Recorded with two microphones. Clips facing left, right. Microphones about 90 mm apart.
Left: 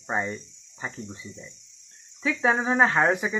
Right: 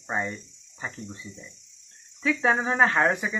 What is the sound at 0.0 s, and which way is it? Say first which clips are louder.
Speech: left 1 dB; 10° left (ahead or behind).